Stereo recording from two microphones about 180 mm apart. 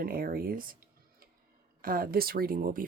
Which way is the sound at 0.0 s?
55° right (ahead or behind).